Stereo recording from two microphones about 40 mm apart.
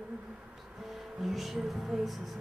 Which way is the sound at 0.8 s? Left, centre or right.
Centre.